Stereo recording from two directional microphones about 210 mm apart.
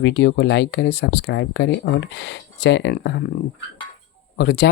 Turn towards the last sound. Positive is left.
turn(degrees=50)  # may be behind; listen again after turning